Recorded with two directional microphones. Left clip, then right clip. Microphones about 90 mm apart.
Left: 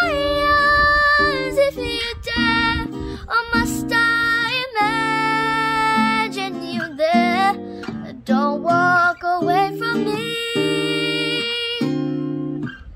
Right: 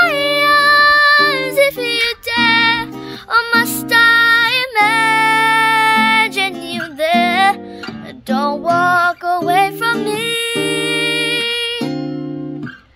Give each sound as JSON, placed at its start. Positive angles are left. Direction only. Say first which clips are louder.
{"t": 0.0, "sound": "child singing", "louder": "right 5 dB", "side_deg": -40}
{"t": 3.3, "sound": "music", "louder": "right 6 dB", "side_deg": -20}